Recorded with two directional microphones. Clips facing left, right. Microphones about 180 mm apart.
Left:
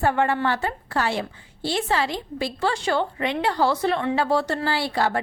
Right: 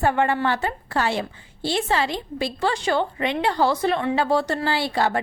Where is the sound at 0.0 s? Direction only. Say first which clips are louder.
Right 1 dB; 20° right (ahead or behind).